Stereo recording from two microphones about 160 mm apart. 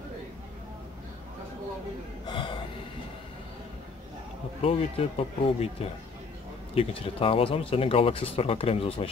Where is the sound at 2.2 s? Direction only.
30° left (ahead or behind).